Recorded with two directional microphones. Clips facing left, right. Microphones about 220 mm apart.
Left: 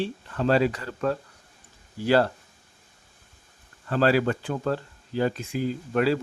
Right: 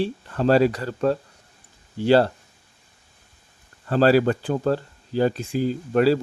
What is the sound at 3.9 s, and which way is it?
Speech, 35° right (ahead or behind).